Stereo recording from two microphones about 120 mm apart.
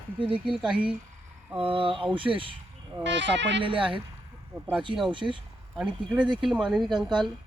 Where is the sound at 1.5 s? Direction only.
50° right (ahead or behind).